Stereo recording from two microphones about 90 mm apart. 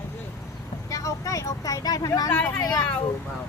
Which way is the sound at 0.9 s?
40° left (ahead or behind).